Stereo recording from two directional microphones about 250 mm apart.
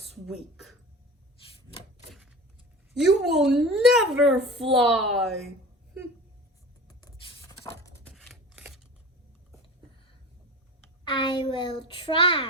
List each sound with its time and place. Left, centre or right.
0.1 s speech: centre
2.9 s a child's voice: centre
7.6 s a sound: centre
8.1 s scissors: centre
11.1 s a child's voice: centre